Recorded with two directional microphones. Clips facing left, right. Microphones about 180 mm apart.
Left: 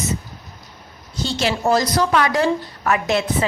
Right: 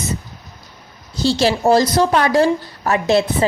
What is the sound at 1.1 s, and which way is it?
A woman's voice, 30° right (ahead or behind).